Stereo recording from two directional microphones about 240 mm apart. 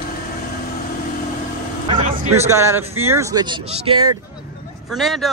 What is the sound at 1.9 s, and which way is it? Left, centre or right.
Speech, centre.